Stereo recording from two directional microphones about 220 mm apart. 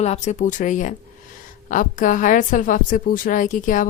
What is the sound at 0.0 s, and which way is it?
A woman's voice, 30° left (ahead or behind).